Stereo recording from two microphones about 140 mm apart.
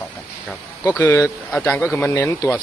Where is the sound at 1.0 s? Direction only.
20° left (ahead or behind).